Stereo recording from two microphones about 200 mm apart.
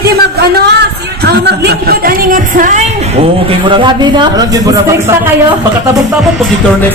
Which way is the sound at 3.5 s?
25° right (ahead or behind).